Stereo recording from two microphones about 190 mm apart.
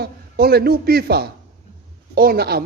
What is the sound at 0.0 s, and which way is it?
A man's voice, 55° right (ahead or behind).